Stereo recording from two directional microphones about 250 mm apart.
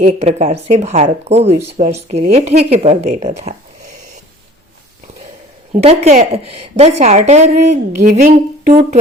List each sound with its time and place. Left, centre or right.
0.0 s speech: right
5.7 s speech: right